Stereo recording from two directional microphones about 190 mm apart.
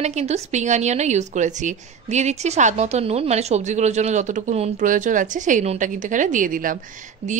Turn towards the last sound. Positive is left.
turn(degrees=-35)  # may be behind; listen again after turning